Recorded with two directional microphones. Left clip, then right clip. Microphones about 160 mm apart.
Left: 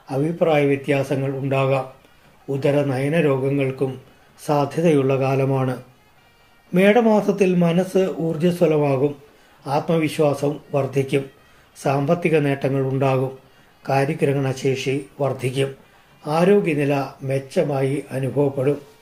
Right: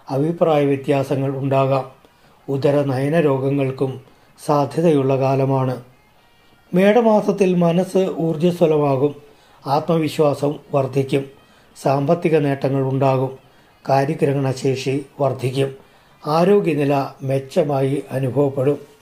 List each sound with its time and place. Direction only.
0.0 s a man's voice: 30° right (ahead or behind)